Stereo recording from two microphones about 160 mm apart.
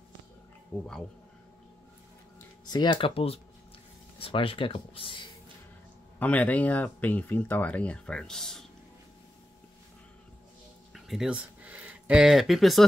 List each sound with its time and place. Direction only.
2.6 s speech: 25° left (ahead or behind)
6.1 s speech: 10° left (ahead or behind)
10.9 s speech: centre (ahead or behind)